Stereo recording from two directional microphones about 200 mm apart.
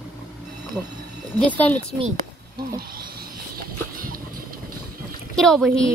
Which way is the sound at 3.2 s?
45° right (ahead or behind).